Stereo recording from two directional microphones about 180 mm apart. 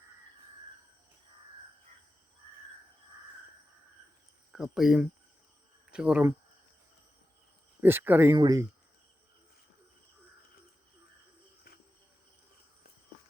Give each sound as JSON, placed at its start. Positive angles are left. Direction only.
{"t": 4.5, "sound": "speech", "side_deg": 0}
{"t": 7.8, "sound": "speech", "side_deg": -10}